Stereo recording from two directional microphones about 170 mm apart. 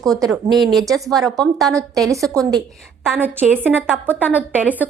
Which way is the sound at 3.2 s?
10° right (ahead or behind).